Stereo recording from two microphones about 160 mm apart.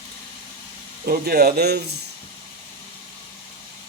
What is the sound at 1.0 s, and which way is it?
Speech, 75° right (ahead or behind).